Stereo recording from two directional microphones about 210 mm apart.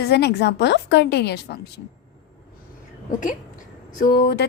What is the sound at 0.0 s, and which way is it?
A woman's voice, 50° left (ahead or behind).